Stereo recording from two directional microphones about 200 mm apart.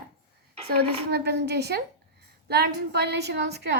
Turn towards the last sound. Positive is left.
turn(degrees=-55)  # may be behind; listen again after turning